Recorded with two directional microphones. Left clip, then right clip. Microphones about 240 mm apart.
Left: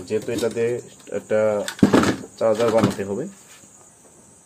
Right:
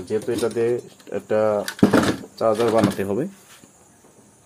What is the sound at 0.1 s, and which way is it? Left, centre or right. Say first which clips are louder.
Speech: even; right.